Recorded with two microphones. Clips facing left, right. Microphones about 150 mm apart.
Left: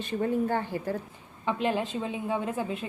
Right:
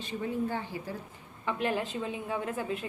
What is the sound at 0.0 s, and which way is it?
Speech, 55° left (ahead or behind).